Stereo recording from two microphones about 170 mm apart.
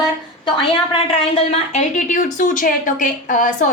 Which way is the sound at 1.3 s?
35° left (ahead or behind).